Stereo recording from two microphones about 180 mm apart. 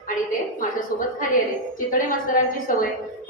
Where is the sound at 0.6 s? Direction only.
50° left (ahead or behind).